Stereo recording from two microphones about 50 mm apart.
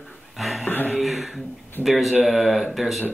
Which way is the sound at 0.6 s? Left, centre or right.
Left.